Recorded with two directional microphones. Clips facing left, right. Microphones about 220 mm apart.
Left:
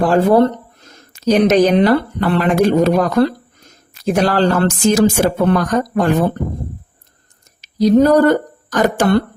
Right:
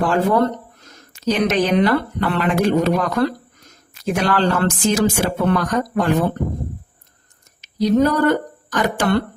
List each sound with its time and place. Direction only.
0.1 s speech: 35° left (ahead or behind)
7.6 s speech: 35° left (ahead or behind)